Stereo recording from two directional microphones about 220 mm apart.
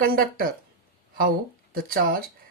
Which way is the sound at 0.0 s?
40° right (ahead or behind).